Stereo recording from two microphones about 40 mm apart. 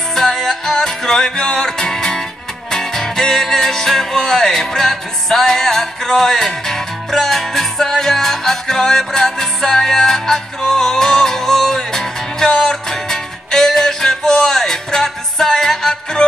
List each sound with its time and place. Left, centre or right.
0.1 s music: centre